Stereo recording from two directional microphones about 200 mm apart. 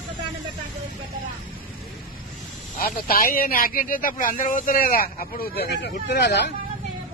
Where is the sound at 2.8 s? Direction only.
45° left (ahead or behind).